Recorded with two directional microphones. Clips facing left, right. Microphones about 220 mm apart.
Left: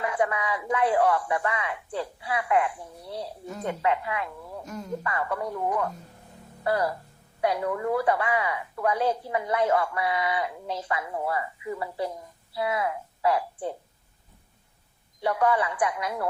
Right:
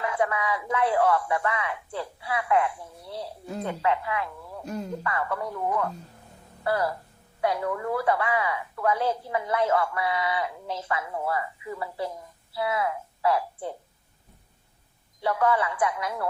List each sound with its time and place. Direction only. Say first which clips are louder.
0.0 s a woman's voice: even; 20° left (ahead or behind)
4.6 s speech: right 7 dB; 30° right (ahead or behind)
5.0 s a woman's voice: left 2 dB; 20° left (ahead or behind)
15.2 s a woman's voice: even; 20° left (ahead or behind)